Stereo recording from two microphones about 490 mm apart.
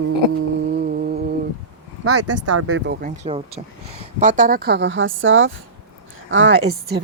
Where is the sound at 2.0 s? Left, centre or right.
Right.